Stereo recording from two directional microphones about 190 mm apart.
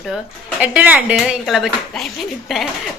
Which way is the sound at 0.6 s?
10° right (ahead or behind).